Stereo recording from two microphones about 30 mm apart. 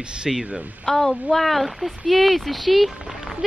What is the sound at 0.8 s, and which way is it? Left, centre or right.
A woman's voice, centre.